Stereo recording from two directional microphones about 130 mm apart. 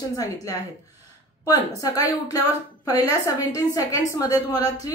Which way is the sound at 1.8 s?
25° left (ahead or behind).